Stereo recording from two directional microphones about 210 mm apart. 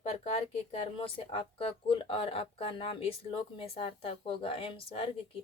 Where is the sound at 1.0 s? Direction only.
25° left (ahead or behind).